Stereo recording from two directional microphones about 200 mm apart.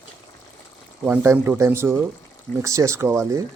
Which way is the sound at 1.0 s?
10° right (ahead or behind).